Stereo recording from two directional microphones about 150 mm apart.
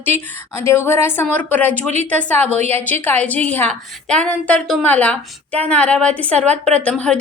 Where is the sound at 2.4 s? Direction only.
50° right (ahead or behind).